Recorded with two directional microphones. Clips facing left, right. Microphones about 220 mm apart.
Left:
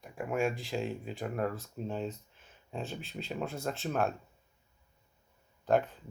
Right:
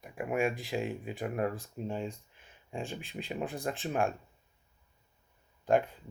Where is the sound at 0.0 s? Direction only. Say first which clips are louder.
Right 1 dB; 15° right (ahead or behind).